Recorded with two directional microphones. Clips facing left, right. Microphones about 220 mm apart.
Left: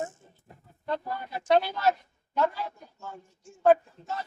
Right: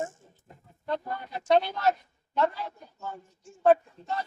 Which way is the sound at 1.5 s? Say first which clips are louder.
Even; 5° left (ahead or behind).